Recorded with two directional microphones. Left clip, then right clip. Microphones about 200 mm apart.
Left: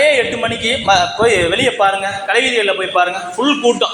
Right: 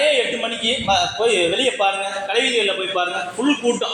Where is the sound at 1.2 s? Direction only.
20° left (ahead or behind).